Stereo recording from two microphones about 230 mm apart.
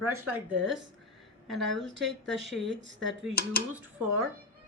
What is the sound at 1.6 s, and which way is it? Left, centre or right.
Speech, right.